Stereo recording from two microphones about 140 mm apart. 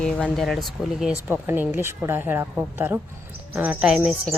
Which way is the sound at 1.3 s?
15° right (ahead or behind).